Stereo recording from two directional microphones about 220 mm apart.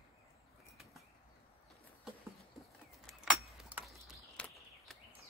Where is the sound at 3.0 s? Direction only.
Centre (ahead or behind).